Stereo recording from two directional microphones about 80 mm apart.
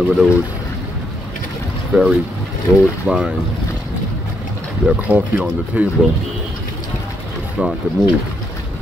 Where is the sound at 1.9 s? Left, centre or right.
Centre.